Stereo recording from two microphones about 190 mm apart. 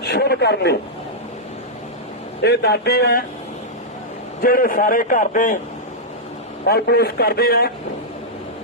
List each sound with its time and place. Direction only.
0.0 s a man's voice: 60° left (ahead or behind)
2.4 s a man's voice: 60° left (ahead or behind)
4.4 s a man's voice: 50° left (ahead or behind)
6.7 s a man's voice: 55° left (ahead or behind)